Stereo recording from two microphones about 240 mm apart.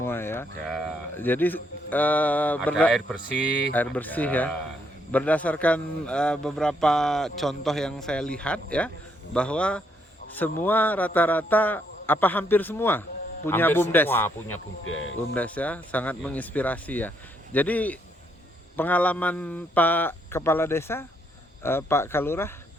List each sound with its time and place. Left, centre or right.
0.0 s a man's voice: centre
14.8 s speech: left
15.4 s a man's voice: centre